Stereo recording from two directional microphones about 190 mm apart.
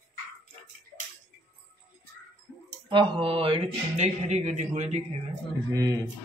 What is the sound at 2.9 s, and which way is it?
Speech, 25° right (ahead or behind).